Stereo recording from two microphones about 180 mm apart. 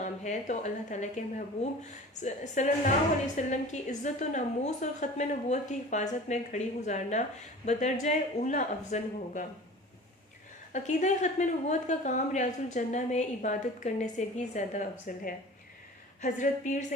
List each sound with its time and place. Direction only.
0.0 s a woman's voice: 40° left (ahead or behind)
10.7 s a woman's voice: 40° left (ahead or behind)